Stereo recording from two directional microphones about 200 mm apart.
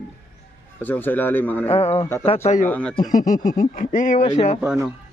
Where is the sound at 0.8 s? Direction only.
10° left (ahead or behind).